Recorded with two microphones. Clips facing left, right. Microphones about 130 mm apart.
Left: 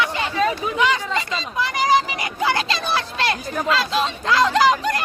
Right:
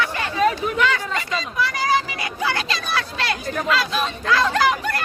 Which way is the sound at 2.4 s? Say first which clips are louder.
Left 3 dB; 30° left (ahead or behind).